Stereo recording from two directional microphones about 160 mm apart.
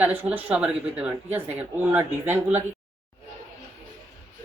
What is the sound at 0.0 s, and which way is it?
A woman's voice, 10° right (ahead or behind).